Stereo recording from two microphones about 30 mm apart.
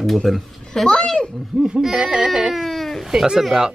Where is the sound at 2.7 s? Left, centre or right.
Centre.